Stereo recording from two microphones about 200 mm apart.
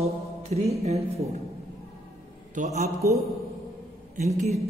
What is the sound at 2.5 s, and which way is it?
Speech, 35° right (ahead or behind).